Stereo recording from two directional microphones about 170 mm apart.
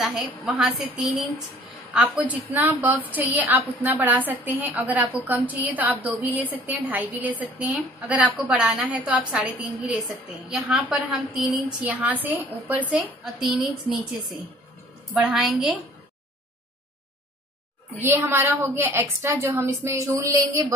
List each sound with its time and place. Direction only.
0.0 s a woman's voice: 5° right (ahead or behind)
2.0 s a woman's voice: 10° right (ahead or behind)
10.5 s a woman's voice: 5° right (ahead or behind)
18.0 s a woman's voice: 10° right (ahead or behind)